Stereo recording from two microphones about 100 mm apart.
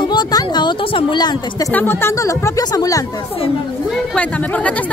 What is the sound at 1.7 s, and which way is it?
Speech, 20° left (ahead or behind).